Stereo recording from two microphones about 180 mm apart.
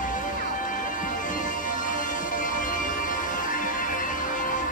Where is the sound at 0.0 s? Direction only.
45° left (ahead or behind).